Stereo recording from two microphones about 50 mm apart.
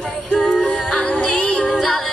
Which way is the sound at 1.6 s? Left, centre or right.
Centre.